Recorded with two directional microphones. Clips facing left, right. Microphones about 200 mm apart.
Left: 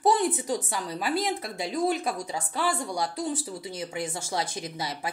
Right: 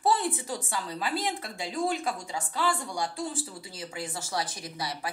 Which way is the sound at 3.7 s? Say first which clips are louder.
Left 3 dB; 20° left (ahead or behind).